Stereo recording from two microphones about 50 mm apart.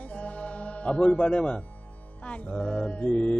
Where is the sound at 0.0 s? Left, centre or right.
Left.